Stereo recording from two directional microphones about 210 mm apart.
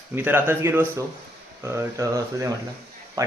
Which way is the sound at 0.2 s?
10° right (ahead or behind).